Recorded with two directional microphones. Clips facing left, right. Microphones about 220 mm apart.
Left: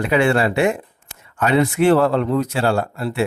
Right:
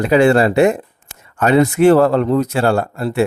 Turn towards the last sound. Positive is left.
turn(degrees=-45)  # may be behind; listen again after turning